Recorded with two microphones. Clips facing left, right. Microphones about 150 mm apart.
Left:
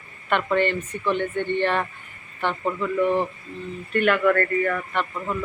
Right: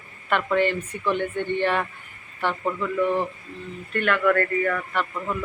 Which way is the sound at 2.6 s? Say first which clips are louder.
Left 2 dB; 10° left (ahead or behind).